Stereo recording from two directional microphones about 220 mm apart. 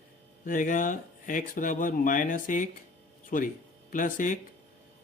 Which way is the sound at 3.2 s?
40° left (ahead or behind).